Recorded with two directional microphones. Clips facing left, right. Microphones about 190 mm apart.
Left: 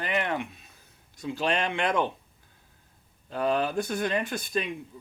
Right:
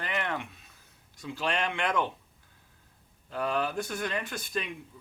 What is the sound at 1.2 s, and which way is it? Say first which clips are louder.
Speech: left 4 dB; 20° left (ahead or behind).